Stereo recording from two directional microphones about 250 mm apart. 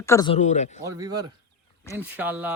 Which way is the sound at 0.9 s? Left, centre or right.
Centre.